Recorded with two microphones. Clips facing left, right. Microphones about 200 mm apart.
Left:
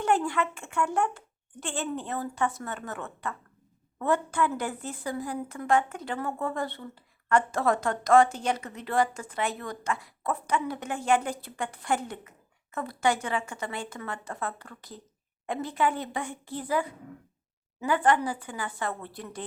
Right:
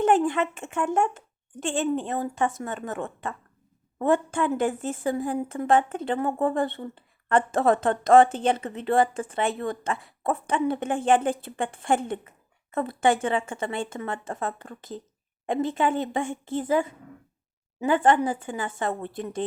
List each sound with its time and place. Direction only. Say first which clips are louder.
0.0 s a child's voice: right 5 dB; 20° right (ahead or behind)
6.6 s speech: right 6 dB; 55° right (ahead or behind)
6.8 s a woman's voice: right 4 dB; 25° right (ahead or behind)
10.2 s a child's voice: right 5 dB; 30° right (ahead or behind)